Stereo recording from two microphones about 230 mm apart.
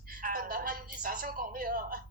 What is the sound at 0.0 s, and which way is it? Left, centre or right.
A woman's voice, right.